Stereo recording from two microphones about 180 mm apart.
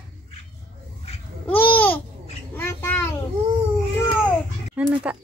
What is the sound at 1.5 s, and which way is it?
Babbling, 10° left (ahead or behind).